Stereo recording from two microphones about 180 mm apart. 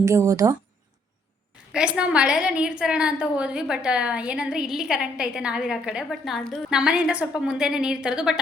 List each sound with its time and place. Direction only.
0.0 s speech: 15° right (ahead or behind)
1.7 s a woman's voice: 5° right (ahead or behind)